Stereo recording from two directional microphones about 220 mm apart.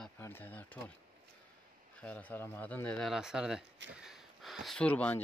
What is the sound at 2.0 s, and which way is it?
Speech, 5° left (ahead or behind).